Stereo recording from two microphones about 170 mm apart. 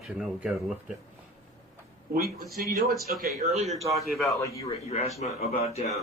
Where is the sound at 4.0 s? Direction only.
Centre (ahead or behind).